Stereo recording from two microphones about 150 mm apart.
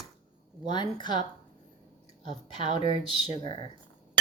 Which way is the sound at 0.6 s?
30° left (ahead or behind).